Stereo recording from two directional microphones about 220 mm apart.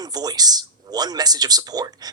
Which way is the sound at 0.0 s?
15° right (ahead or behind).